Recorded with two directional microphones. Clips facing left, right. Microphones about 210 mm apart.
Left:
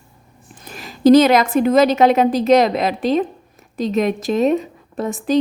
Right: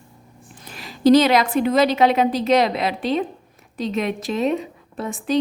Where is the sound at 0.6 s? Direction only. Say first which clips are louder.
Left 4 dB; 45° left (ahead or behind).